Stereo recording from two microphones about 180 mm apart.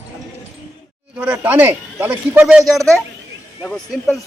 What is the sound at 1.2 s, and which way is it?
Speech, 10° right (ahead or behind).